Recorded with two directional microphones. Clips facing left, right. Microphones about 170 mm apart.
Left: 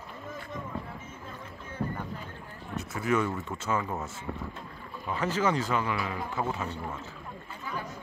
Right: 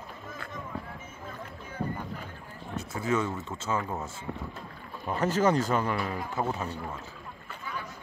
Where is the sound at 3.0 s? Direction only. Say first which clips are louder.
Left 1 dB; 25° right (ahead or behind).